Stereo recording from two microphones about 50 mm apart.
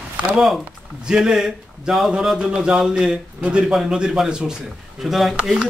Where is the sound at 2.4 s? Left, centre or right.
Right.